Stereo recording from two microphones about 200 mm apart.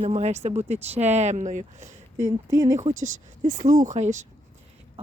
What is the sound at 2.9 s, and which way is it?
Speech, 90° right.